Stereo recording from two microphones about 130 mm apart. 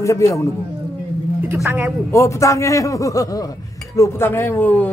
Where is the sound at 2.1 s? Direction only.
20° left (ahead or behind).